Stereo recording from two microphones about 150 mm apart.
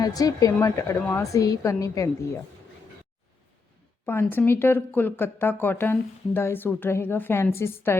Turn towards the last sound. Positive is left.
turn(degrees=15)  # may be behind; listen again after turning